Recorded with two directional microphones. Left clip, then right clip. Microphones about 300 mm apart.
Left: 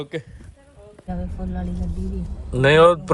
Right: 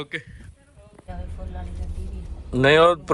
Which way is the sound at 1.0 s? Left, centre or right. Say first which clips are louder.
Left 7 dB; centre.